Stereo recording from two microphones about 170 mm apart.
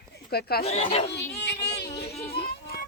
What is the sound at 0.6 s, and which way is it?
Speech, 35° left (ahead or behind).